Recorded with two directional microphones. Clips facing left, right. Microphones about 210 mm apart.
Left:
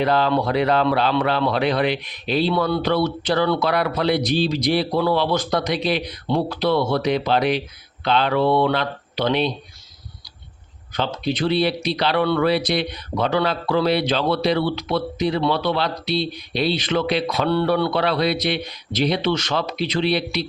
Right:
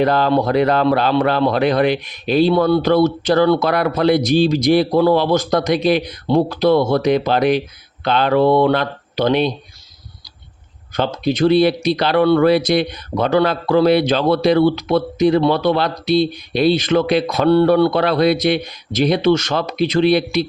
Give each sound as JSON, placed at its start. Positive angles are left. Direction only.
{"t": 0.0, "sound": "speech", "side_deg": -45}
{"t": 10.9, "sound": "speech", "side_deg": -45}